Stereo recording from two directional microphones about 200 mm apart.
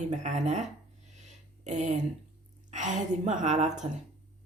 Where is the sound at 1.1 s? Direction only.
35° right (ahead or behind).